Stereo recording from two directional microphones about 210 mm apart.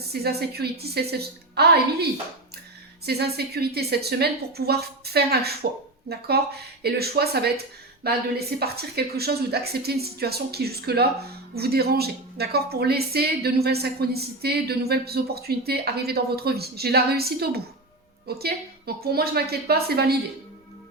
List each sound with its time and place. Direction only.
0.1 s a woman's voice: 50° right (ahead or behind)